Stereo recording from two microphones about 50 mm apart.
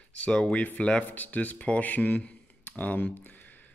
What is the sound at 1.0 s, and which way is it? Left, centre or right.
Speech, left.